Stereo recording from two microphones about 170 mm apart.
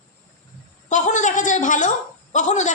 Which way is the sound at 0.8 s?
45° left (ahead or behind).